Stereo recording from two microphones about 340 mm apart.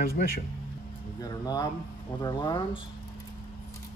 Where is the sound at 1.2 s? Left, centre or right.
Centre.